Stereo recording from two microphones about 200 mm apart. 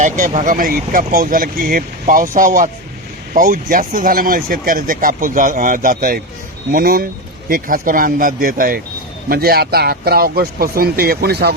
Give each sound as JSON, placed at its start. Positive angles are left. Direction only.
{"t": 0.0, "sound": "speech", "side_deg": -40}